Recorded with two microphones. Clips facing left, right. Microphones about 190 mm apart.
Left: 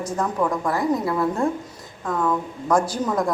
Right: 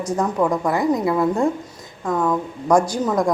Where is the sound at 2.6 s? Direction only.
15° right (ahead or behind).